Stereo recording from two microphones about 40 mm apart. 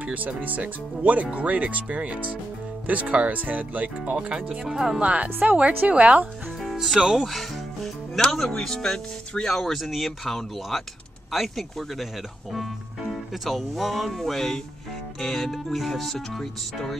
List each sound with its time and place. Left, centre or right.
0.0 s speech: right
4.1 s speech: right
4.5 s speech: centre
5.0 s speech: right
6.6 s music: centre
7.2 s speech: centre
7.8 s speech: centre